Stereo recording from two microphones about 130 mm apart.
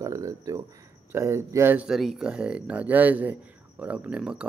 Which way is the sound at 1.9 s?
5° right (ahead or behind).